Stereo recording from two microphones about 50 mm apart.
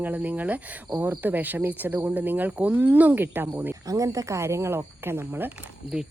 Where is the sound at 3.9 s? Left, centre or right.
Right.